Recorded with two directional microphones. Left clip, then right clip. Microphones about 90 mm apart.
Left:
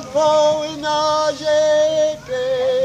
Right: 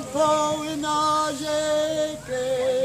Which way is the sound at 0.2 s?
35° right (ahead or behind).